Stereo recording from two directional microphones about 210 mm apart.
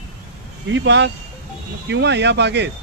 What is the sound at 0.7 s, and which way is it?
Speech, 60° right (ahead or behind).